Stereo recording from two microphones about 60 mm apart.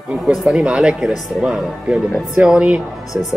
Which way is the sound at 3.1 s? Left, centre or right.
Right.